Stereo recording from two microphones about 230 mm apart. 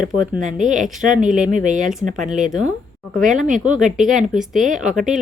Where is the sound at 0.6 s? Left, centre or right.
Right.